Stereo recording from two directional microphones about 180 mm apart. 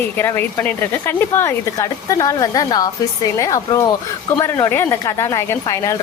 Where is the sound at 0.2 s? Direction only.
15° left (ahead or behind).